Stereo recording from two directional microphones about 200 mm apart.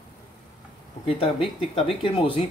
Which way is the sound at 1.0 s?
25° left (ahead or behind).